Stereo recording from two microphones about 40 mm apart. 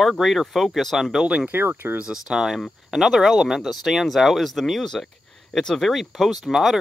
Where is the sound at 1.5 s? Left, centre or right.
Right.